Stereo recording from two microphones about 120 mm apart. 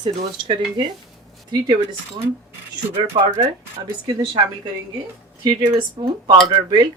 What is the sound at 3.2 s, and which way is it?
Speech, 50° right (ahead or behind).